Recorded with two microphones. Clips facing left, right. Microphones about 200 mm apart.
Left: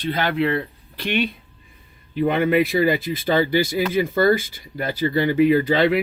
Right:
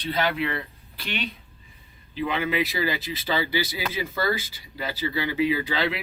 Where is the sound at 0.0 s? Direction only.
50° left (ahead or behind).